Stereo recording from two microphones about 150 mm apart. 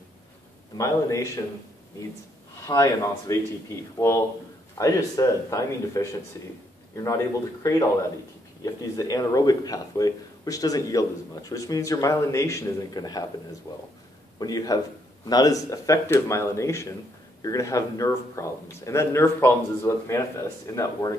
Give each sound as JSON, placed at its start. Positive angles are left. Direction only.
{"t": 0.7, "sound": "speech", "side_deg": 20}
{"t": 2.6, "sound": "speech", "side_deg": 20}
{"t": 7.6, "sound": "speech", "side_deg": 25}
{"t": 8.9, "sound": "speech", "side_deg": 25}